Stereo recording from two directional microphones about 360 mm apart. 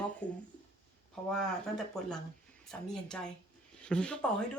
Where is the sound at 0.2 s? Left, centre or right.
Centre.